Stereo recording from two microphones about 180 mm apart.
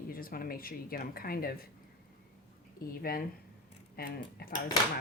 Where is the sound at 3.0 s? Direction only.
55° left (ahead or behind).